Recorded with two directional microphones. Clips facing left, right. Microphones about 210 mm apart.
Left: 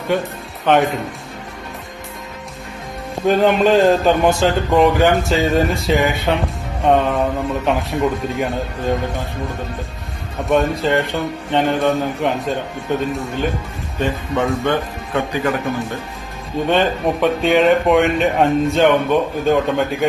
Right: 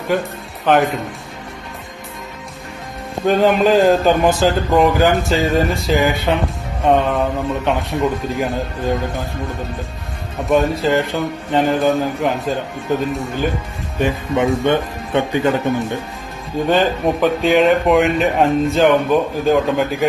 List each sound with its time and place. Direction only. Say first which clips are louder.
0.1 s a man's voice: even; centre (ahead or behind)
3.2 s a man's voice: even; centre (ahead or behind)
10.5 s a man's voice: right 1 dB; centre (ahead or behind)
14.0 s speech: right 2 dB; 15° right (ahead or behind)
16.6 s a man's voice: right 1 dB; centre (ahead or behind)